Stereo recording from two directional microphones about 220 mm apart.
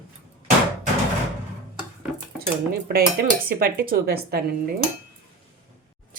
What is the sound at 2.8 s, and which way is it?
Speech, 45° right (ahead or behind).